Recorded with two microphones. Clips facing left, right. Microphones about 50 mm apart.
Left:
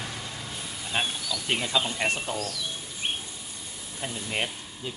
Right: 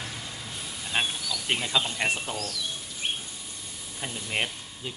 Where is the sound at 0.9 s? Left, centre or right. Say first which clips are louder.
Even; centre.